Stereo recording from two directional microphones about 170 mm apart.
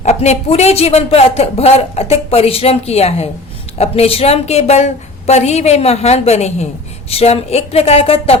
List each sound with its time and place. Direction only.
0.0 s speech: 40° left (ahead or behind)